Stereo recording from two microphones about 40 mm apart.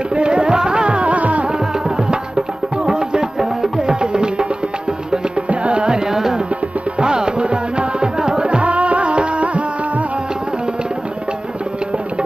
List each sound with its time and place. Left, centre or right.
0.1 s music: right
1.5 s music: centre
7.0 s music: right